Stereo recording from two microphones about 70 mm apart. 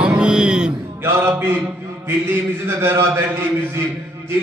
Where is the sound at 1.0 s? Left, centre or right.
Right.